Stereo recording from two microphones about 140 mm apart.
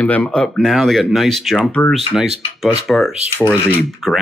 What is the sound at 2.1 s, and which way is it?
Speech, 5° right (ahead or behind).